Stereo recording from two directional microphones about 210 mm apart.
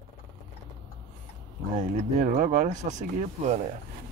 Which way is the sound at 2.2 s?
40° right (ahead or behind).